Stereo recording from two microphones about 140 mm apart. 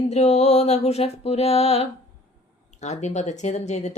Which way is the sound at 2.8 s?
55° left (ahead or behind).